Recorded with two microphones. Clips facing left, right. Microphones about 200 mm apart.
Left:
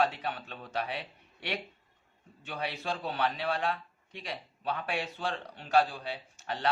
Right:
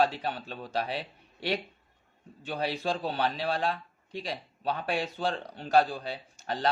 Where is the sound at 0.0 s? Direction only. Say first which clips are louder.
Right 3 dB; 35° right (ahead or behind).